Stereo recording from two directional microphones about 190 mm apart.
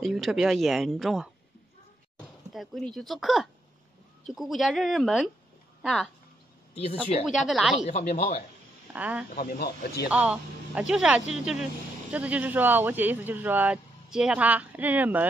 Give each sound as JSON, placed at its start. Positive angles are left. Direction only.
{"t": 0.0, "sound": "speech", "side_deg": 0}
{"t": 2.5, "sound": "speech", "side_deg": 0}
{"t": 5.8, "sound": "a sound", "side_deg": 0}
{"t": 6.7, "sound": "speech", "side_deg": 30}
{"t": 7.2, "sound": "speech", "side_deg": 0}
{"t": 7.7, "sound": "speech", "side_deg": 35}
{"t": 8.9, "sound": "speech", "side_deg": -10}
{"t": 9.3, "sound": "speech", "side_deg": 50}
{"t": 10.0, "sound": "speech", "side_deg": -5}